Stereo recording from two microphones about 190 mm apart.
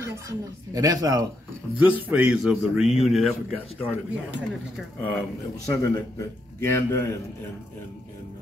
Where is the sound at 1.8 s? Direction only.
10° right (ahead or behind).